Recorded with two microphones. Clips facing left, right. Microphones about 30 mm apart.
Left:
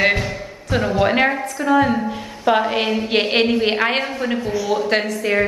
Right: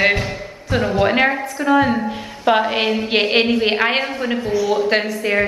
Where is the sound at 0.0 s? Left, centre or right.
Centre.